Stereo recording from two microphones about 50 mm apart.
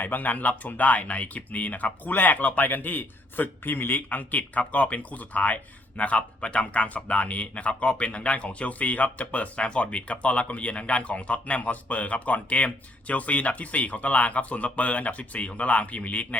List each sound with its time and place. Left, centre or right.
0.0 s speech: left